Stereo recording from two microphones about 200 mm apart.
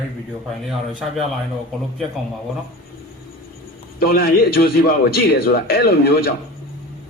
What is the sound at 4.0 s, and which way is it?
A man's voice, 50° left (ahead or behind).